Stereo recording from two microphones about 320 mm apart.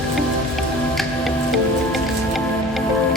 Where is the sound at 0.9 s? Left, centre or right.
Centre.